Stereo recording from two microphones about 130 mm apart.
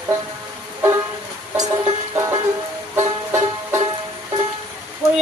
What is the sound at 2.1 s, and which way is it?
Banjo, 25° right (ahead or behind).